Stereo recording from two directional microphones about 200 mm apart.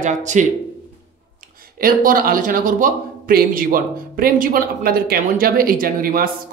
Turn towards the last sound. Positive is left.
turn(degrees=-45)  # may be behind; listen again after turning